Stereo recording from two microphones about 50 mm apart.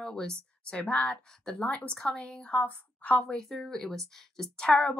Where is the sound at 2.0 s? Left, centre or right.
Centre.